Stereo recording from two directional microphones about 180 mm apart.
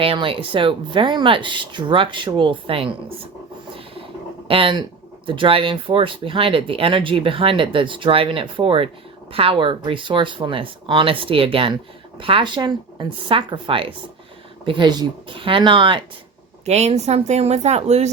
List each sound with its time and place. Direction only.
0.0 s speech: 30° right (ahead or behind)
4.4 s speech: 30° right (ahead or behind)
16.6 s speech: 35° right (ahead or behind)